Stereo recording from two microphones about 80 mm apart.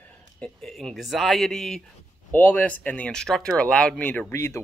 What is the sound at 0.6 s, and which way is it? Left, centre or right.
Speech, centre.